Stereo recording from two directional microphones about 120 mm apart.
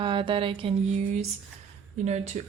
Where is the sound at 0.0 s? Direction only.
45° right (ahead or behind).